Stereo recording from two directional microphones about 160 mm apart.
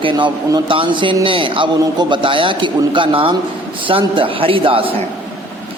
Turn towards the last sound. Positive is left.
turn(degrees=-35)  # may be behind; listen again after turning